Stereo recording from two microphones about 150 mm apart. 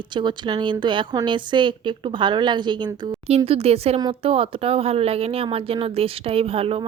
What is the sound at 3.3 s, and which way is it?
Speech, 40° right (ahead or behind).